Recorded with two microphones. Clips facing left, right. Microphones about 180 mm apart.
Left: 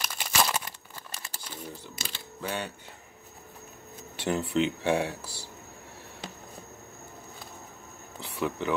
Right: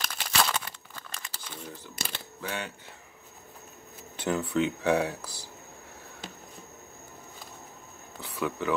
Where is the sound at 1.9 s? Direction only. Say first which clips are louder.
Right 2 dB; 55° right (ahead or behind).